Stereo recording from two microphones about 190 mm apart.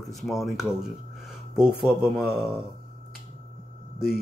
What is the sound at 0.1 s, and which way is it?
Speech, centre (ahead or behind).